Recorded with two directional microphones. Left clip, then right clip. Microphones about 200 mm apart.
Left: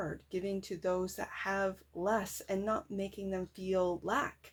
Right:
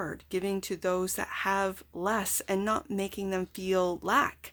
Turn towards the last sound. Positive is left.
turn(degrees=-40)  # may be behind; listen again after turning